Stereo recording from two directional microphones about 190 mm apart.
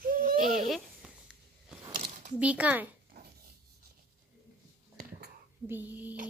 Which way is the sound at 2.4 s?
5° right (ahead or behind).